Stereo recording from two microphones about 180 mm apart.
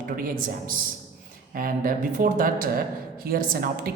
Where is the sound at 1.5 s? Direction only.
50° right (ahead or behind).